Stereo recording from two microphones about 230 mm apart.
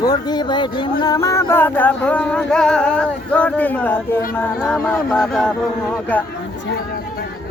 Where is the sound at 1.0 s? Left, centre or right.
Centre.